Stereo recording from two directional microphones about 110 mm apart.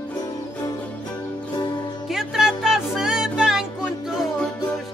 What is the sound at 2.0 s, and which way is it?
Music, 5° right (ahead or behind).